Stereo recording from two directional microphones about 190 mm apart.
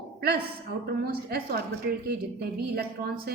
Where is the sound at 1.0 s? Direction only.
55° right (ahead or behind).